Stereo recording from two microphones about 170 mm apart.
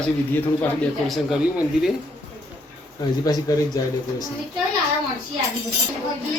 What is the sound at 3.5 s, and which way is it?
Speech, 20° left (ahead or behind).